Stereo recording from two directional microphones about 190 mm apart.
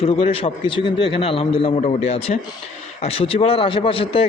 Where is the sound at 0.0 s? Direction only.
30° left (ahead or behind).